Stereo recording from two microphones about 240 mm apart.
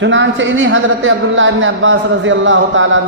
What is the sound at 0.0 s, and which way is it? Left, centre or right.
A man's voice, right.